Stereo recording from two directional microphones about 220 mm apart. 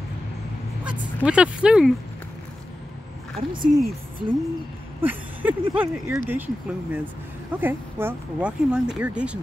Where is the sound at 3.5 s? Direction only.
40° right (ahead or behind).